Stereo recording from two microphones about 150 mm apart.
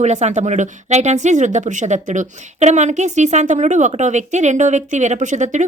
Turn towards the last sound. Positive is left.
turn(degrees=-55)  # may be behind; listen again after turning